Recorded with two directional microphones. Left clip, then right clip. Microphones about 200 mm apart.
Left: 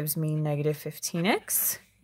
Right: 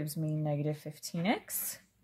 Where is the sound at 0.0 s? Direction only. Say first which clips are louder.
Left 5 dB; 40° left (ahead or behind).